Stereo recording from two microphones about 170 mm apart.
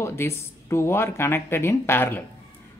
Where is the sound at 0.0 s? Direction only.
15° left (ahead or behind).